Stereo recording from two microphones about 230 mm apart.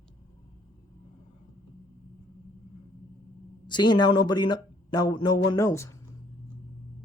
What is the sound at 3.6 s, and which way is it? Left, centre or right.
Speech, centre.